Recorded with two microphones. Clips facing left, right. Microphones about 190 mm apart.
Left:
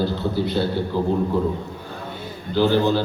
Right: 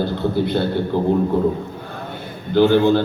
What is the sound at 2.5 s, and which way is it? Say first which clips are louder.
Speech: right 5 dB; 55° right (ahead or behind).